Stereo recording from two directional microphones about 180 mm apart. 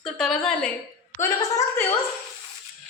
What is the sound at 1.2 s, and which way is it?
Speech, 15° left (ahead or behind).